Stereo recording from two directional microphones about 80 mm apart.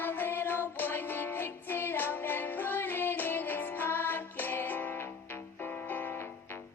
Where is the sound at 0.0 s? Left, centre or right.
Left.